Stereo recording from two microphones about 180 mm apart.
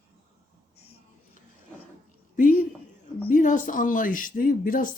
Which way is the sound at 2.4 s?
45° left (ahead or behind).